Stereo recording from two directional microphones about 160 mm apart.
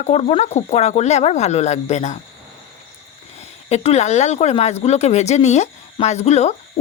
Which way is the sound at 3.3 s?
40° left (ahead or behind).